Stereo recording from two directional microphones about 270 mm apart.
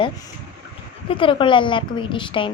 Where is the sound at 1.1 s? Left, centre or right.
Centre.